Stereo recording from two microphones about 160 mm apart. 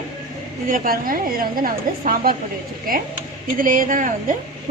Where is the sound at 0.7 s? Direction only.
60° right (ahead or behind).